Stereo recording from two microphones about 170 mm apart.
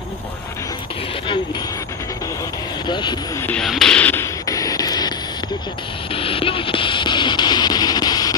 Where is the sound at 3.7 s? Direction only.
5° left (ahead or behind).